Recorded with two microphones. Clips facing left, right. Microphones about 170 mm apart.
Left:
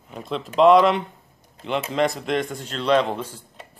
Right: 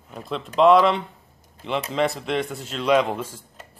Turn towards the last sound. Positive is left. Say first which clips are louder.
# even
turn(degrees=-5)  # may be behind; listen again after turning